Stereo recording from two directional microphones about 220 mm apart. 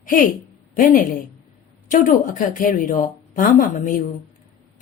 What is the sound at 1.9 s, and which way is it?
A woman's voice, 35° left (ahead or behind).